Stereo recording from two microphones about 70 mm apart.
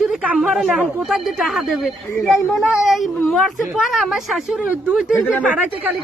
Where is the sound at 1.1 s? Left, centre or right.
Centre.